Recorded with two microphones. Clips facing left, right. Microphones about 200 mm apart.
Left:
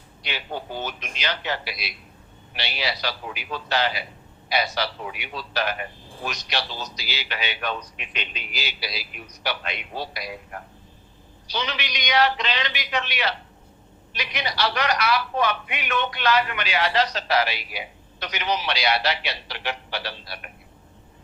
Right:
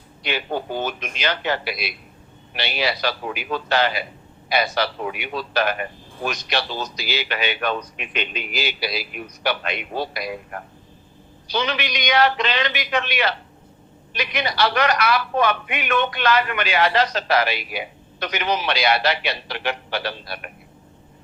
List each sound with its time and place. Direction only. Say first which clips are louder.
0.2 s speech: right 7 dB; 55° right (ahead or behind)